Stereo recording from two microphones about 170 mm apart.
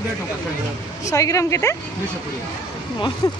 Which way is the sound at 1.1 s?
20° left (ahead or behind).